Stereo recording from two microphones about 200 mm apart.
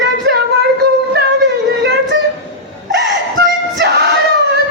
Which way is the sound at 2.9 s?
55° right (ahead or behind).